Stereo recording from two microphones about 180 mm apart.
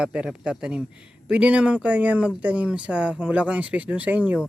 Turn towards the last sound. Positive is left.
turn(degrees=-5)  # may be behind; listen again after turning